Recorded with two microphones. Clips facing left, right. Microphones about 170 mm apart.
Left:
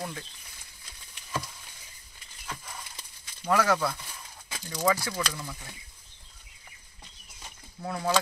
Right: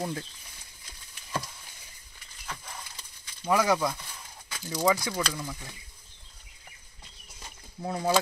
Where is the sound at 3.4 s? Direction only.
15° right (ahead or behind).